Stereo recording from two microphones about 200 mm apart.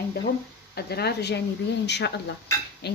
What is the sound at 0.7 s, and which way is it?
Speech, 55° left (ahead or behind).